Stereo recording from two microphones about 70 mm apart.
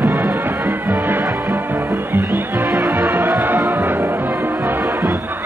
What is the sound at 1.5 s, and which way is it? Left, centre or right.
Music, right.